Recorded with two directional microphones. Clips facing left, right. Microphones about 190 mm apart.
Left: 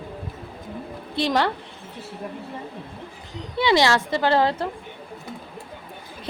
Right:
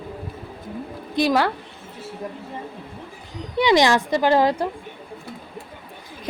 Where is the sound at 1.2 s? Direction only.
10° right (ahead or behind).